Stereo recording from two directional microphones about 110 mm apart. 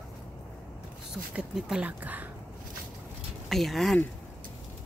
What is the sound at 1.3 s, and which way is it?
Speech, 10° right (ahead or behind).